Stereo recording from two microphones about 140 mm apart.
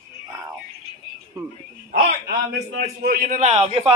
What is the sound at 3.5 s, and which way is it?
Speech, 50° right (ahead or behind).